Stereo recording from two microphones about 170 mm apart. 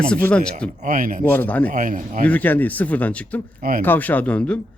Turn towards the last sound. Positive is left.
turn(degrees=5)  # may be behind; listen again after turning